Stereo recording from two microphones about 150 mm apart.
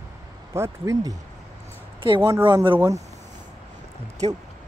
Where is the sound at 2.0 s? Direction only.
30° right (ahead or behind).